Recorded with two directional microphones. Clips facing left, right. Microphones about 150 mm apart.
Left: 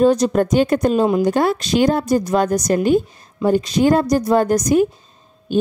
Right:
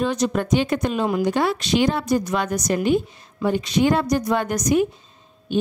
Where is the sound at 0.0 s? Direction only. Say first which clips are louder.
Left 7 dB; 40° left (ahead or behind).